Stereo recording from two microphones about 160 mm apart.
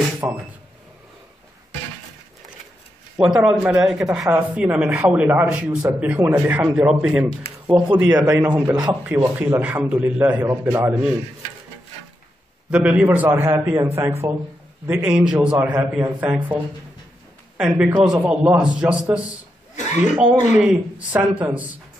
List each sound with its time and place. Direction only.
0.2 s speech: 20° right (ahead or behind)
3.2 s a man's voice: 5° right (ahead or behind)
7.6 s speech: 25° right (ahead or behind)
8.3 s speech: 10° right (ahead or behind)
12.7 s speech: 10° right (ahead or behind)
17.6 s a man's voice: 5° right (ahead or behind)
19.7 s a sound: 50° left (ahead or behind)
20.2 s speech: 5° right (ahead or behind)